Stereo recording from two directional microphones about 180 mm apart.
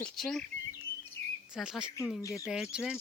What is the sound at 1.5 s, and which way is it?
Speech, 5° right (ahead or behind).